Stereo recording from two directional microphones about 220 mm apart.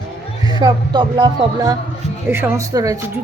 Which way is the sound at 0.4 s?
20° right (ahead or behind).